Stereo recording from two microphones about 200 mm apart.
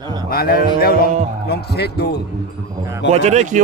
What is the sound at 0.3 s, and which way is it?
Speech, 50° left (ahead or behind).